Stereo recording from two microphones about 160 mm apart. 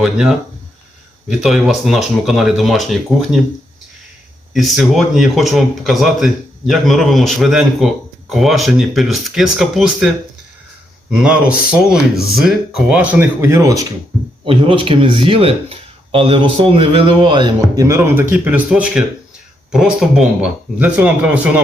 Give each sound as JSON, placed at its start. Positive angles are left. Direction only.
{"t": 0.0, "sound": "speech", "side_deg": -5}
{"t": 4.5, "sound": "speech", "side_deg": 0}
{"t": 11.2, "sound": "speech", "side_deg": -5}
{"t": 14.4, "sound": "speech", "side_deg": -30}